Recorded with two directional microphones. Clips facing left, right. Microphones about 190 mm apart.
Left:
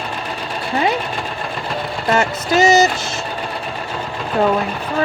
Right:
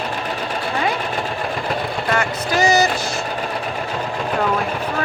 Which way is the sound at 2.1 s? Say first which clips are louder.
Left 5 dB; 25° left (ahead or behind).